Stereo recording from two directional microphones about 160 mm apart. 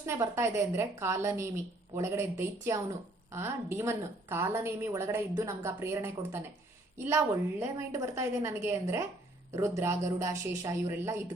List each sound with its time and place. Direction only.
0.0 s a woman's voice: 15° right (ahead or behind)
7.6 s a woman's voice: 20° right (ahead or behind)